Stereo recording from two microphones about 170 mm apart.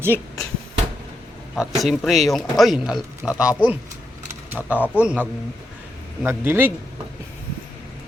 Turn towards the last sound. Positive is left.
turn(degrees=-15)  # may be behind; listen again after turning